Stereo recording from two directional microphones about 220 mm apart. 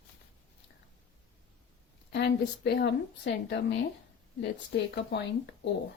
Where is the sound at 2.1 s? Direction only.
45° left (ahead or behind).